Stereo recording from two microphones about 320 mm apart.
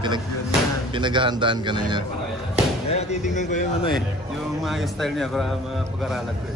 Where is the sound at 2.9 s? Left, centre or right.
Centre.